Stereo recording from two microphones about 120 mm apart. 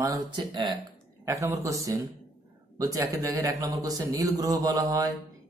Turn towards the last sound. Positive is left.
turn(degrees=-30)  # may be behind; listen again after turning